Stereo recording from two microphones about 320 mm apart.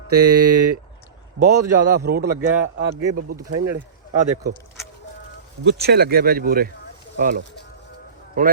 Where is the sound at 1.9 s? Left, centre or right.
Right.